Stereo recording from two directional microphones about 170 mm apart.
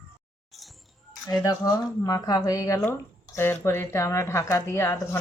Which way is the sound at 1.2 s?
20° left (ahead or behind).